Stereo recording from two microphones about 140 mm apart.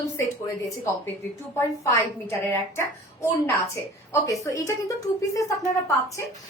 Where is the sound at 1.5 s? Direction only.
20° left (ahead or behind).